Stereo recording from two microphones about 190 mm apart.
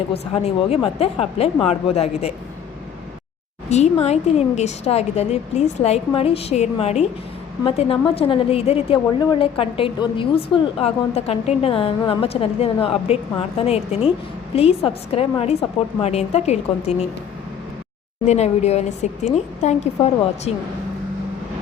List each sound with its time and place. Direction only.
0.1 s a woman's voice: 30° left (ahead or behind)
3.7 s a woman's voice: 35° left (ahead or behind)
18.3 s a woman's voice: 35° left (ahead or behind)